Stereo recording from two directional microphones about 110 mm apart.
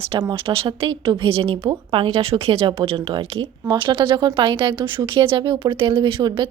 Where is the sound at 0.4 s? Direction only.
60° right (ahead or behind).